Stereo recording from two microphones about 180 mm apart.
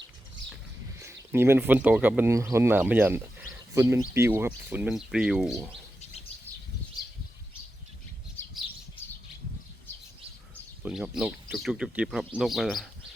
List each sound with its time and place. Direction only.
0.9 s speech: 15° right (ahead or behind)
10.5 s speech: 5° right (ahead or behind)